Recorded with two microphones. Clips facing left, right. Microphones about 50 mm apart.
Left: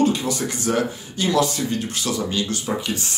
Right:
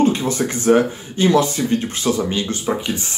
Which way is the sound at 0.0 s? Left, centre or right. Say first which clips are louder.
Right 3 dB; right.